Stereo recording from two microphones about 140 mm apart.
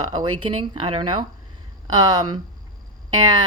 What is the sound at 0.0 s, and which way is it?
A woman's voice, 30° right (ahead or behind).